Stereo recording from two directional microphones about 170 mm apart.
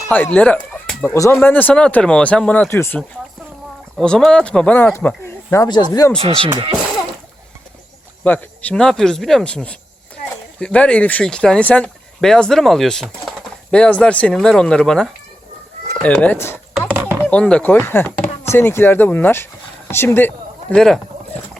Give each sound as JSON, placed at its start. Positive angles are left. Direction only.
{"t": 0.1, "sound": "speech", "side_deg": 10}
{"t": 1.1, "sound": "speech", "side_deg": 15}
{"t": 3.9, "sound": "speech", "side_deg": 5}
{"t": 5.6, "sound": "speech", "side_deg": 25}
{"t": 6.1, "sound": "speech", "side_deg": -30}
{"t": 8.2, "sound": "speech", "side_deg": 10}
{"t": 16.9, "sound": "a sound", "side_deg": -10}
{"t": 17.2, "sound": "speech", "side_deg": 5}